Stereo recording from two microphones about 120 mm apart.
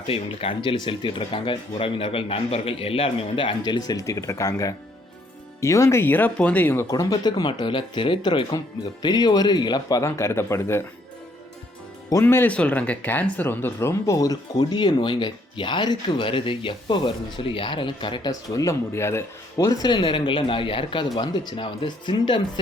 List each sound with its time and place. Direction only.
0.1 s speech: 45° left (ahead or behind); by 6.8 s 15° left (ahead or behind)
6.9 s speech: 35° left (ahead or behind)
10.0 s speech: 25° left (ahead or behind)
12.2 s speech: 15° left (ahead or behind); by 22.6 s 40° left (ahead or behind)